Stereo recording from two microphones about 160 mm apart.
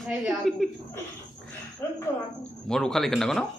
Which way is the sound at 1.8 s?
20° left (ahead or behind).